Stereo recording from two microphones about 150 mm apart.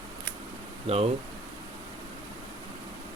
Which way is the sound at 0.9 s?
45° right (ahead or behind).